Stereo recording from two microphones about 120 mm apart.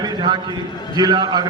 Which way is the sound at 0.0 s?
40° right (ahead or behind).